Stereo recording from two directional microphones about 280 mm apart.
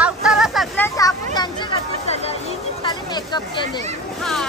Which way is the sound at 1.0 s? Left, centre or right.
Centre.